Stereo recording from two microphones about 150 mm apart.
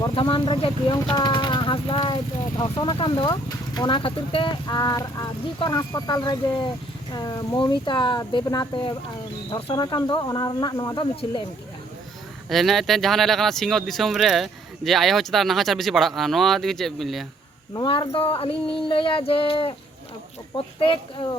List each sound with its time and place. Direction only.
0.1 s speech: 35° left (ahead or behind)
11.1 s speech: 40° left (ahead or behind)
12.5 s speech: centre (ahead or behind)
17.7 s speech: 30° left (ahead or behind)
20.7 s speech: 35° left (ahead or behind)